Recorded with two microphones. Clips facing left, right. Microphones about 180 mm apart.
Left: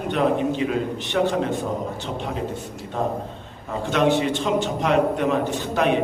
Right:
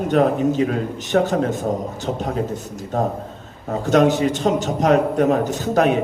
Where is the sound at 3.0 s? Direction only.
45° right (ahead or behind).